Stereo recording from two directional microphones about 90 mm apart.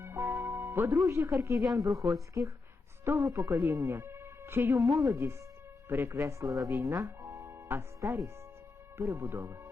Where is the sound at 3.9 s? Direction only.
25° right (ahead or behind).